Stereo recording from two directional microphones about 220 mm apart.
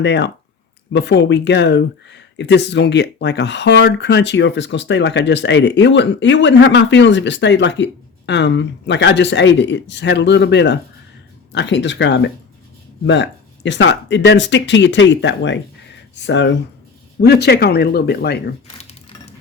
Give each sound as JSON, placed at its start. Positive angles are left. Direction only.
{"t": 0.0, "sound": "speech", "side_deg": 50}